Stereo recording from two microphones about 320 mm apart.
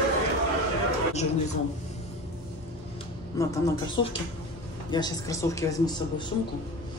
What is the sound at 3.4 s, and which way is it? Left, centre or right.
A woman's voice, centre.